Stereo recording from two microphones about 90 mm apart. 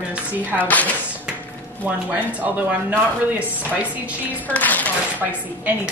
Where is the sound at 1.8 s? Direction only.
20° right (ahead or behind).